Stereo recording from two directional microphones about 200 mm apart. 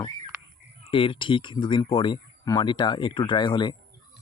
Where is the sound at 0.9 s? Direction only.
25° left (ahead or behind).